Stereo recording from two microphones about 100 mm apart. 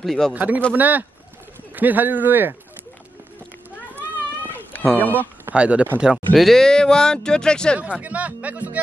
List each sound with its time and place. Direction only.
0.0 s speech: 5° left (ahead or behind)
0.3 s speech: 15° right (ahead or behind)
4.5 s run: 20° left (ahead or behind)
5.0 s speech: 20° left (ahead or behind)
5.5 s speech: 10° right (ahead or behind)
6.3 s speech: 5° left (ahead or behind)
7.8 s speech: 15° right (ahead or behind)